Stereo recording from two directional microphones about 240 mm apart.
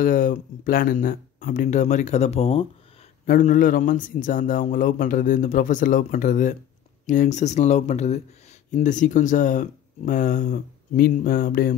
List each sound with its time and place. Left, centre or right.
0.0 s speech: left